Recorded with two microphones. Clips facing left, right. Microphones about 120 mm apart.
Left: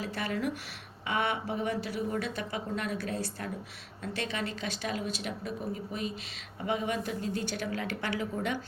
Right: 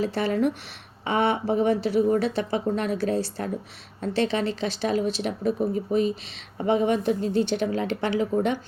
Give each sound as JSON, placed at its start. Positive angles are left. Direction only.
{"t": 0.0, "sound": "a woman's voice", "side_deg": -30}